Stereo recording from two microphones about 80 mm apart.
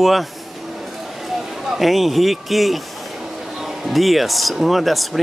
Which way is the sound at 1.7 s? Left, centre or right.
Centre.